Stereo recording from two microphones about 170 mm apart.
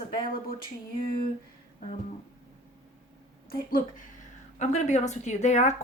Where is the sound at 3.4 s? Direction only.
55° left (ahead or behind).